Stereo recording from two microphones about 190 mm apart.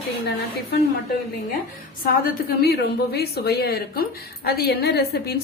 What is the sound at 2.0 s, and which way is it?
A woman's voice, 50° left (ahead or behind).